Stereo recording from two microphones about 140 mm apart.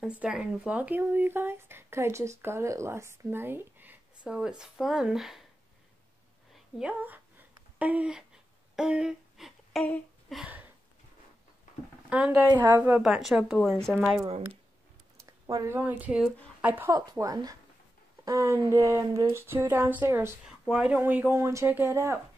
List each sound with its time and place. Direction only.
0.0 s speech: 5° right (ahead or behind)
6.5 s a sound: 10° right (ahead or behind)
10.3 s a sound: 10° right (ahead or behind)
12.1 s speech: 10° right (ahead or behind)
13.0 s speech: centre (ahead or behind)
15.4 s speech: 25° right (ahead or behind)
15.7 s speech: 10° right (ahead or behind)
16.9 s speech: 25° right (ahead or behind)
20.6 s speech: 5° right (ahead or behind)